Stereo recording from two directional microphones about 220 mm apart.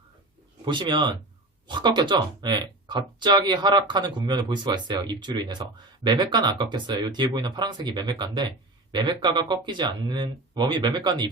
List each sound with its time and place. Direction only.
0.6 s speech: 20° right (ahead or behind)